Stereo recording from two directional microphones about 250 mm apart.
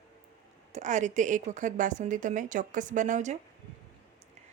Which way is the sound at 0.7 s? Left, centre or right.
Right.